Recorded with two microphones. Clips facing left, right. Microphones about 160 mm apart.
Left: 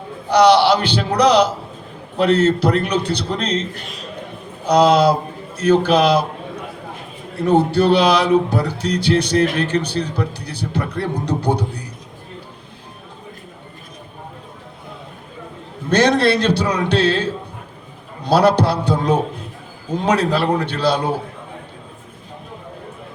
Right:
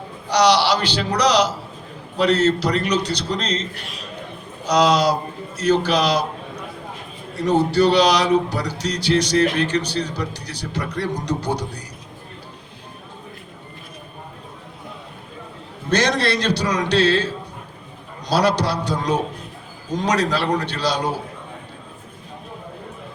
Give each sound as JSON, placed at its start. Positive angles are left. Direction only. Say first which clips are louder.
{"t": 0.3, "sound": "speech", "louder": "left 5 dB", "side_deg": 55}
{"t": 7.3, "sound": "speech", "louder": "left 2 dB", "side_deg": 55}
{"t": 15.9, "sound": "speech", "louder": "left 5 dB", "side_deg": 55}